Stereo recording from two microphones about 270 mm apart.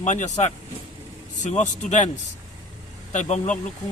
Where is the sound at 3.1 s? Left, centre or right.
Left.